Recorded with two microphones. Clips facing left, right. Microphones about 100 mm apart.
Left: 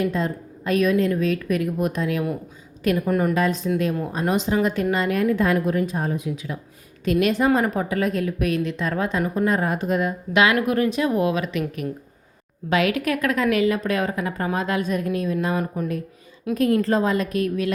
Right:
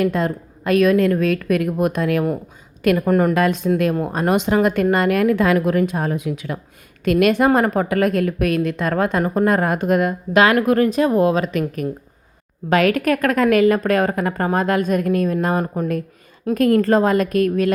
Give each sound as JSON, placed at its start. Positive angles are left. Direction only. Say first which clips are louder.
{"t": 0.0, "sound": "a woman's voice", "louder": "right 4 dB", "side_deg": -65}
{"t": 10.3, "sound": "speech", "louder": "right 5 dB", "side_deg": -40}
{"t": 12.7, "sound": "a woman's voice", "louder": "right 5 dB", "side_deg": -45}
{"t": 16.6, "sound": "a woman's voice", "louder": "right 5 dB", "side_deg": -55}